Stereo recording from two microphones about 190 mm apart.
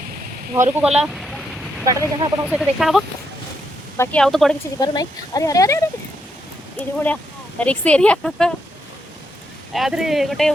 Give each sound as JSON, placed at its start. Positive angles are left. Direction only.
{"t": 0.5, "sound": "speech", "side_deg": -10}
{"t": 1.8, "sound": "speech", "side_deg": -20}
{"t": 2.5, "sound": "speech", "side_deg": 0}
{"t": 3.9, "sound": "speech", "side_deg": 15}
{"t": 4.2, "sound": "speech", "side_deg": 0}
{"t": 4.8, "sound": "speech", "side_deg": 20}
{"t": 9.7, "sound": "speech", "side_deg": 0}